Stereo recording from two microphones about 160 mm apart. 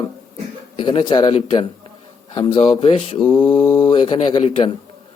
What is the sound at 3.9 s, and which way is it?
Speech, 30° left (ahead or behind).